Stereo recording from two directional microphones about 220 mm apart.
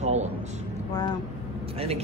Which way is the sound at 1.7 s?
25° right (ahead or behind).